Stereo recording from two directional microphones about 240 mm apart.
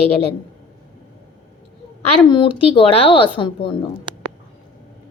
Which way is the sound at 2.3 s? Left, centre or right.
Left.